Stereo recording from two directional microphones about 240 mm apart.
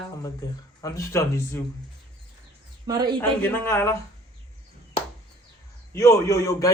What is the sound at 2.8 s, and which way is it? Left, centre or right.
Speech, centre.